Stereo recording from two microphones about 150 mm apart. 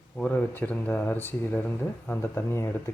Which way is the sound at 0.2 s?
10° left (ahead or behind).